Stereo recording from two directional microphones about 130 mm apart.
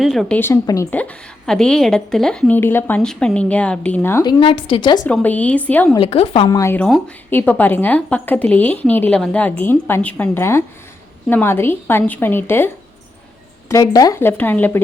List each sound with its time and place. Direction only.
0.0 s a woman's voice: centre (ahead or behind)
0.3 s speech: 20° left (ahead or behind)
0.9 s a woman's voice: 10° left (ahead or behind)
4.2 s a woman's voice: 35° left (ahead or behind)
5.0 s a woman's voice: 10° left (ahead or behind)
6.0 s a woman's voice: 45° left (ahead or behind)
6.5 s speech: 25° left (ahead or behind)
6.7 s a woman's voice: 5° left (ahead or behind)
7.3 s a woman's voice: 15° left (ahead or behind)
14.2 s a woman's voice: 15° left (ahead or behind)